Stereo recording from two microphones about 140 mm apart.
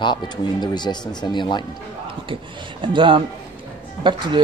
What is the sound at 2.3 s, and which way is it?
Speech, 35° right (ahead or behind).